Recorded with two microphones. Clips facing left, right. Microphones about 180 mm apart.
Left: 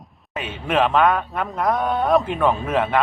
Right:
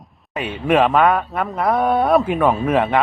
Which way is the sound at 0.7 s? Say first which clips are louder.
Right 3 dB; 10° right (ahead or behind).